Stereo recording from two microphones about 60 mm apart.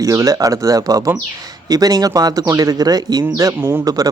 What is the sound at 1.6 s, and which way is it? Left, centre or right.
Speech, right.